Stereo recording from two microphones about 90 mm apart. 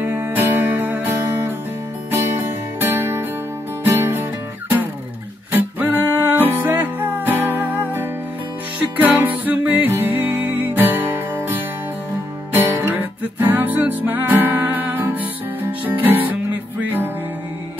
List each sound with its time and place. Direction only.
0.0 s music: 20° right (ahead or behind)
12.5 s music: 25° right (ahead or behind)